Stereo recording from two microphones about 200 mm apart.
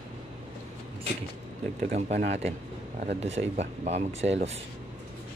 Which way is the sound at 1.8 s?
35° right (ahead or behind).